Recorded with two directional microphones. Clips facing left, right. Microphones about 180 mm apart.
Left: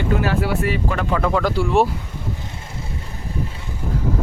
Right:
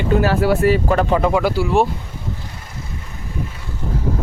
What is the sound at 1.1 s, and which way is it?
Speech, 15° right (ahead or behind).